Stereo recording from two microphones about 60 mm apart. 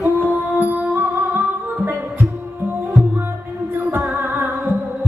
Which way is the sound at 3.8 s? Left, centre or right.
Right.